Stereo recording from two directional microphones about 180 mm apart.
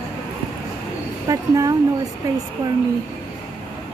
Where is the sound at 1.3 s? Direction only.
20° right (ahead or behind).